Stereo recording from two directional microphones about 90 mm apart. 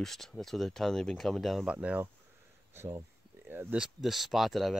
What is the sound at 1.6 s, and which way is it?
Speech, 15° right (ahead or behind).